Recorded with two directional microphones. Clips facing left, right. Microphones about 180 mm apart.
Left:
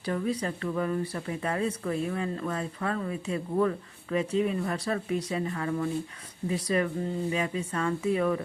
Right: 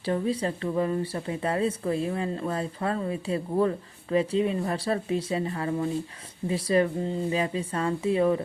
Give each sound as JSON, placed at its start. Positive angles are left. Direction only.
{"t": 0.0, "sound": "speech", "side_deg": -30}